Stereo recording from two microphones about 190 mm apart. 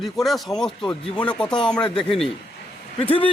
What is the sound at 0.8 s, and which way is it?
Speech, 25° left (ahead or behind).